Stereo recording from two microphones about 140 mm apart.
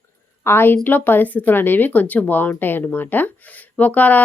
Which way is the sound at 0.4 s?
15° left (ahead or behind).